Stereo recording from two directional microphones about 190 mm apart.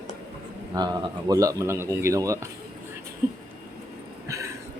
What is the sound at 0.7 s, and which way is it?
Speech, 20° right (ahead or behind).